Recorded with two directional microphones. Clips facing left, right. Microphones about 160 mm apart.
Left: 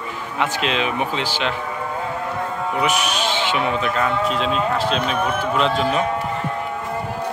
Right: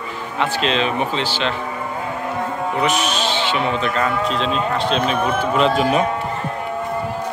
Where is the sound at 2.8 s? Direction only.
10° left (ahead or behind).